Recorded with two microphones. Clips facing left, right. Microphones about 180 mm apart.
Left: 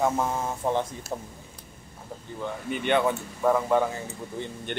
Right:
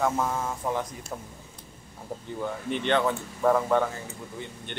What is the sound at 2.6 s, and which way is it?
Speech, 10° left (ahead or behind).